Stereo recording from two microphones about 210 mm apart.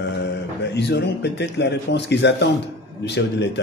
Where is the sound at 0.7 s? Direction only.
55° left (ahead or behind).